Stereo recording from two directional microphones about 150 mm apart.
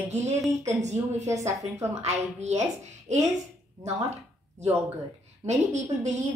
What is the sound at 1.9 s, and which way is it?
A woman's voice, 50° right (ahead or behind).